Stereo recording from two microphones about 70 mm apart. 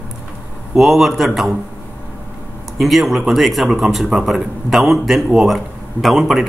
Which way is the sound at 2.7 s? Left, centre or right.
Centre.